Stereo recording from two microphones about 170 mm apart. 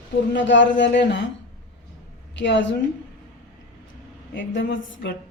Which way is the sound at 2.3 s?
90° left.